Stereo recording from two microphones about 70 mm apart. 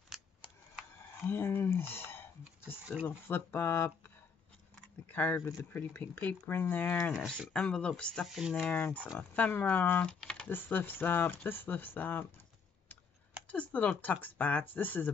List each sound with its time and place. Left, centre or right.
1.2 s speech: left
5.0 s speech: left
7.2 s speech: centre
8.4 s speech: centre
8.7 s speech: left
10.5 s speech: left
13.5 s speech: left